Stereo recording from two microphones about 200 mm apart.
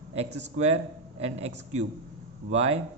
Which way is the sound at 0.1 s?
30° right (ahead or behind).